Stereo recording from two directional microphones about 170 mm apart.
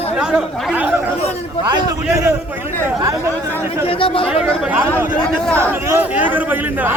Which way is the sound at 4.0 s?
30° left (ahead or behind).